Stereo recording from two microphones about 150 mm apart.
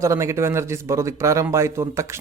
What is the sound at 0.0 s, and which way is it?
A man's voice, 20° right (ahead or behind).